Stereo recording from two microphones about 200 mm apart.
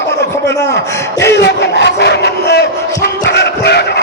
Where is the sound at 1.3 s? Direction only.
60° left (ahead or behind).